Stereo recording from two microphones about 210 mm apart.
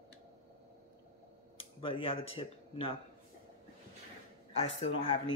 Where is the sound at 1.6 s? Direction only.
25° left (ahead or behind).